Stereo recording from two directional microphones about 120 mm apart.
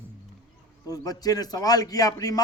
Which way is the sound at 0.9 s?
30° left (ahead or behind).